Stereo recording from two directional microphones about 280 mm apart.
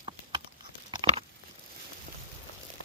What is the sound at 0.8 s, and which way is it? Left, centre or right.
Patter, centre.